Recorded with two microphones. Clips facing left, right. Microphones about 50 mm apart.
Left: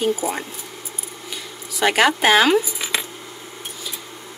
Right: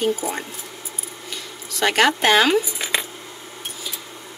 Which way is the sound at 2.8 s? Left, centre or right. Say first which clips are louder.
Right 1 dB; right.